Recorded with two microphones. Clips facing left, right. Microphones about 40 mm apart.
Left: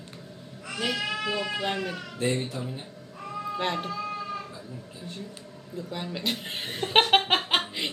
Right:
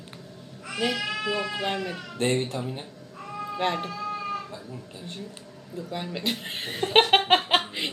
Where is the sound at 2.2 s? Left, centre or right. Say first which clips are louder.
Right 2 dB; right.